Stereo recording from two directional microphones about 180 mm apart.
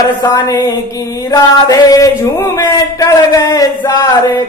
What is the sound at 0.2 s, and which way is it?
Mantra, 20° left (ahead or behind).